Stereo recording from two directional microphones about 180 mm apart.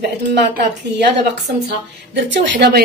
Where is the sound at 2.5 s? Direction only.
65° right (ahead or behind).